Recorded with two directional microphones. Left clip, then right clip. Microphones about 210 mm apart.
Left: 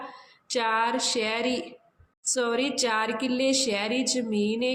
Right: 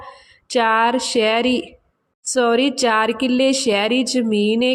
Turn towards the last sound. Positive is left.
turn(degrees=-45)  # may be behind; listen again after turning